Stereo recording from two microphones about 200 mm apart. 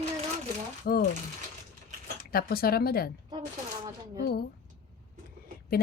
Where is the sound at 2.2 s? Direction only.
50° left (ahead or behind).